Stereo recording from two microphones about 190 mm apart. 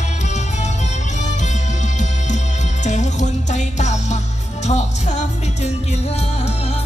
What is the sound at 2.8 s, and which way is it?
Music, 40° left (ahead or behind).